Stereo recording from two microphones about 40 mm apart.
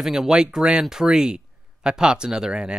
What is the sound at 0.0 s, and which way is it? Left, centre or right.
Speech, centre.